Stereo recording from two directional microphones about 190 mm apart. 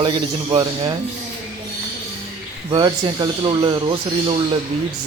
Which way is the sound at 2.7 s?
25° right (ahead or behind).